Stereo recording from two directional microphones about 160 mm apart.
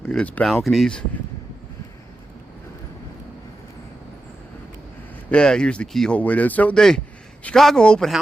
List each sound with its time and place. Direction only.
0.0 s speech: 5° left (ahead or behind)
5.3 s speech: 5° left (ahead or behind)